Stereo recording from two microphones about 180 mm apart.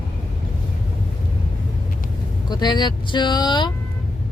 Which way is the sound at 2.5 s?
25° left (ahead or behind).